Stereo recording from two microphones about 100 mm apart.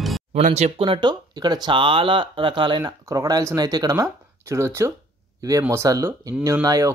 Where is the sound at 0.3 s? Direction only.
90° right; by 2.8 s 55° right (ahead or behind).